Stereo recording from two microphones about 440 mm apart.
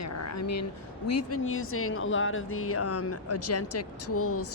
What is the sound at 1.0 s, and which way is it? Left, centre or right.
Speech, left.